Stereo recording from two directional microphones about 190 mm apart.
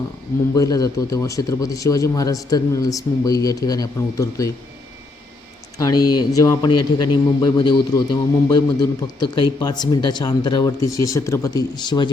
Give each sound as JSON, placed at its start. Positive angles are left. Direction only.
{"t": 0.5, "sound": "speech", "side_deg": 20}
{"t": 5.7, "sound": "a man's voice", "side_deg": 20}